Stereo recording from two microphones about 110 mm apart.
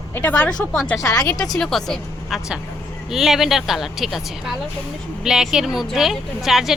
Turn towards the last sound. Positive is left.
turn(degrees=0)  # may be behind; listen again after turning